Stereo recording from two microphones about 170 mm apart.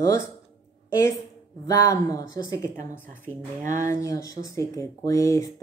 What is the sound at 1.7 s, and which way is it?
Speech, 20° left (ahead or behind).